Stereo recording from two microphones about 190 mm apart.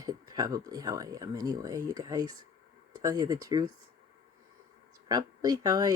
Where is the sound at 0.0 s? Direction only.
20° right (ahead or behind).